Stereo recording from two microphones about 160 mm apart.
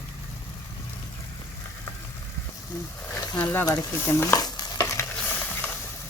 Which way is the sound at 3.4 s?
15° left (ahead or behind).